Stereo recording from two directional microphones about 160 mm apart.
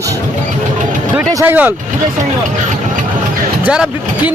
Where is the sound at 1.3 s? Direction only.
20° right (ahead or behind).